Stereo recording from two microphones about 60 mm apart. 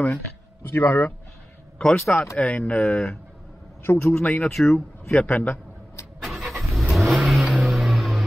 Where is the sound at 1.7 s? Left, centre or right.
Centre.